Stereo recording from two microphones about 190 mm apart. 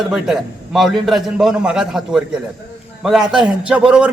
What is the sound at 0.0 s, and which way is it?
A man's voice, centre (ahead or behind).